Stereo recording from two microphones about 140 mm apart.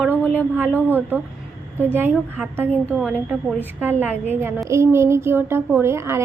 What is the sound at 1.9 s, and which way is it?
Speech, 10° right (ahead or behind).